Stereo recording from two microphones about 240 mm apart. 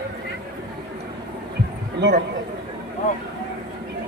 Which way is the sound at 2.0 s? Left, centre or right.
Right.